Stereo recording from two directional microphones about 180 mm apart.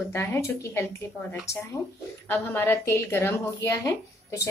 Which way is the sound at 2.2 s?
15° left (ahead or behind).